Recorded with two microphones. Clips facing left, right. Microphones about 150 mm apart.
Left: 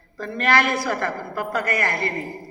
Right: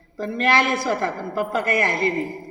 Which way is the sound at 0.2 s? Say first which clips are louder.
Right 1 dB; 20° right (ahead or behind).